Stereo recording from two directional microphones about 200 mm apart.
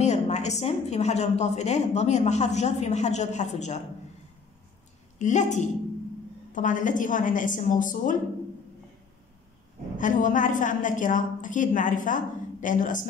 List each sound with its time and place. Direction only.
0.0 s a woman's voice: 35° left (ahead or behind)
5.2 s a woman's voice: 35° left (ahead or behind)
9.9 s a woman's voice: 40° left (ahead or behind)